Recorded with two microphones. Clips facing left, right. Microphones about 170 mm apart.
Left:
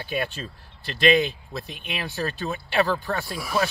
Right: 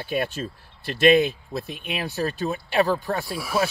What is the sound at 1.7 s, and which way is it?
Speech, 45° right (ahead or behind).